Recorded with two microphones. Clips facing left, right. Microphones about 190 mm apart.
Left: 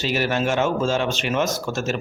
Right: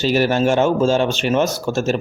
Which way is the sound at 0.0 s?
35° right (ahead or behind).